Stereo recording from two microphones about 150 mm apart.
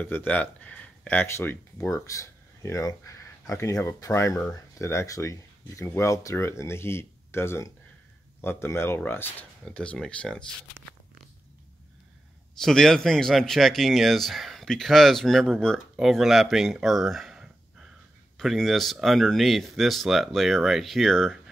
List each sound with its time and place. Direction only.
0.0 s speech: 15° left (ahead or behind)
12.5 s speech: 5° left (ahead or behind)